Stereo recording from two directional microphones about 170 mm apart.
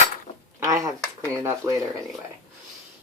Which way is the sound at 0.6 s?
20° right (ahead or behind).